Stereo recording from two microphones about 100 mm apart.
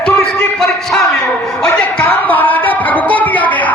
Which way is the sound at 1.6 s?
15° left (ahead or behind).